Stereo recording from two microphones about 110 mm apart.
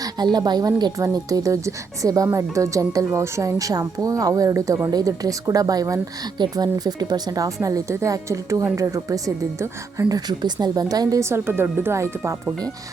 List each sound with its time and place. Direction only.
0.3 s speech: 40° right (ahead or behind)